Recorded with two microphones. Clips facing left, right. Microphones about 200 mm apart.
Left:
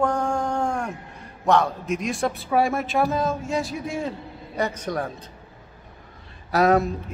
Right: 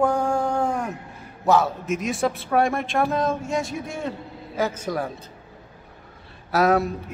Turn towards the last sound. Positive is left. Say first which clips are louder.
# left 1 dB
turn(degrees=0)  # may be behind; listen again after turning